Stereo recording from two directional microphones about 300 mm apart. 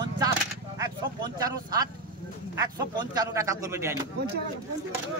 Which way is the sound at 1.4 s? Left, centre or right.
Centre.